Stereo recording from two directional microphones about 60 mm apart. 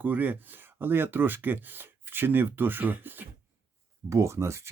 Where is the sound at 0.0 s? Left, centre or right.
Right.